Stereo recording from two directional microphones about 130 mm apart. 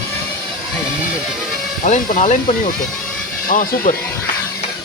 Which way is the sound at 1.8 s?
85° left.